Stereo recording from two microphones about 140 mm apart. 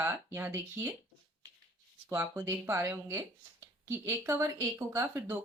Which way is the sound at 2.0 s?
15° right (ahead or behind).